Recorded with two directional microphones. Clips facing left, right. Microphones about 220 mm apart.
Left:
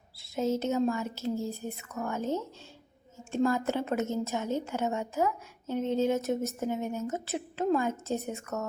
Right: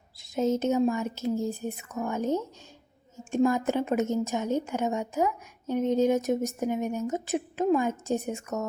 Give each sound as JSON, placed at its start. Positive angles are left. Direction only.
{"t": 0.2, "sound": "a woman's voice", "side_deg": -20}